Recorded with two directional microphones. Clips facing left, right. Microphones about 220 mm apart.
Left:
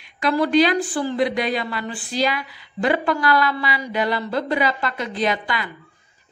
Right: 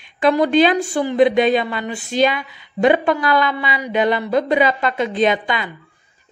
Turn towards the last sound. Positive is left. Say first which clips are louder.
# right 5 dB
turn(degrees=-20)  # may be behind; listen again after turning